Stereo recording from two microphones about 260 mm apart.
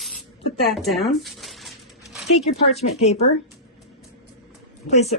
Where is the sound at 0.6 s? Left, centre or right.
Centre.